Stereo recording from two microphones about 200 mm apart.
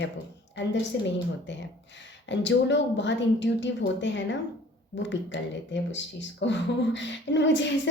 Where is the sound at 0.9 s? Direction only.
60° left (ahead or behind).